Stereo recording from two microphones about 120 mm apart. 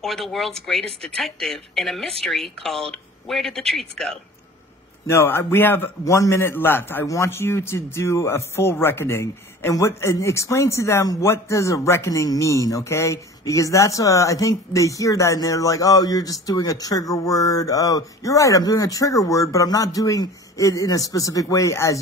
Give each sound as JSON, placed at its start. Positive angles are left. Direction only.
{"t": 0.0, "sound": "speech", "side_deg": 0}
{"t": 5.1, "sound": "a man's voice", "side_deg": 20}